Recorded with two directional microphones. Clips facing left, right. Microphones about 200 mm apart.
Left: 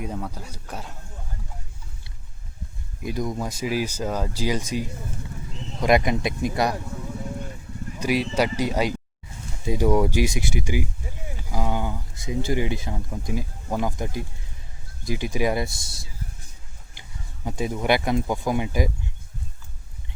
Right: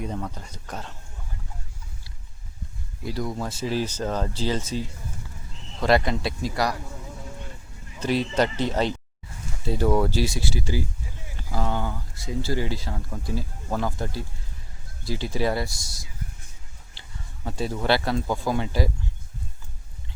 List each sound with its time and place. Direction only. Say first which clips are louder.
0.0 s speech: even; 10° left (ahead or behind)
3.0 s speech: left 2 dB; 20° left (ahead or behind)
7.9 s speech: even; 10° left (ahead or behind)
16.9 s speech: left 1 dB; 15° left (ahead or behind)